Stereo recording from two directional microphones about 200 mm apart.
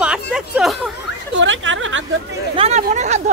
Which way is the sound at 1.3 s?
65° right (ahead or behind).